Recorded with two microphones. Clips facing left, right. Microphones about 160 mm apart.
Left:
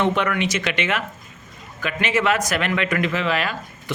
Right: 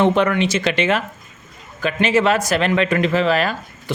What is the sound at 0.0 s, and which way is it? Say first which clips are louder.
Speech: right 5 dB; 35° right (ahead or behind).